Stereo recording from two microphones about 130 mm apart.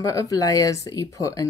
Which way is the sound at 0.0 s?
25° left (ahead or behind).